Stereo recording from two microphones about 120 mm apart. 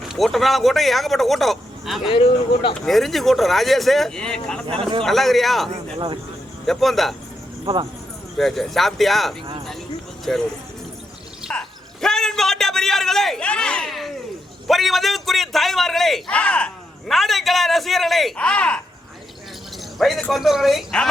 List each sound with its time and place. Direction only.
0.0 s a man's voice: centre (ahead or behind)
2.0 s speech: 45° left (ahead or behind)
2.8 s a man's voice: centre (ahead or behind)
4.6 s speech: 50° right (ahead or behind)
5.0 s a man's voice: centre (ahead or behind)
7.6 s speech: 45° right (ahead or behind)
8.4 s a man's voice: centre (ahead or behind)
11.5 s a sound: 5° left (ahead or behind)
14.7 s a man's voice: centre (ahead or behind)
20.0 s a man's voice: centre (ahead or behind)